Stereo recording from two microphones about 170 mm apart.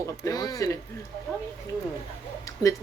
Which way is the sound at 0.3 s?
20° left (ahead or behind).